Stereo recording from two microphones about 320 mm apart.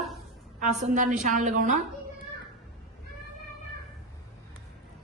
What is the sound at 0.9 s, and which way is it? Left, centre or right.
Speech, right.